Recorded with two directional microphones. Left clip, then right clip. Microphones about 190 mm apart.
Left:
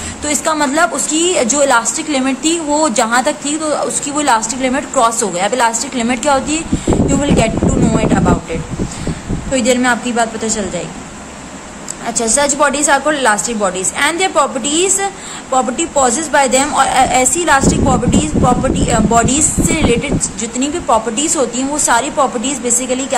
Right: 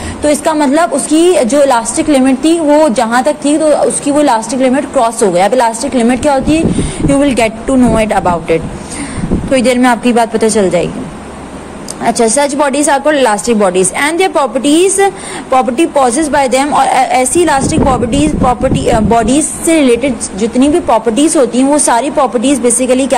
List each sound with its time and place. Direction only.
0.2 s a woman's voice: 10° right (ahead or behind)
7.1 s a woman's voice: 25° right (ahead or behind)
12.0 s a woman's voice: 25° right (ahead or behind)